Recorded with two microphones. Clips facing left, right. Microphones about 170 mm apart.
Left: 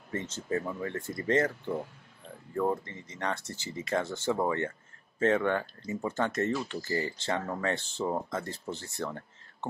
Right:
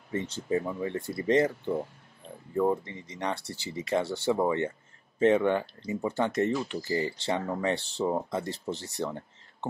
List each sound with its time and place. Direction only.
0.1 s speech: 15° right (ahead or behind)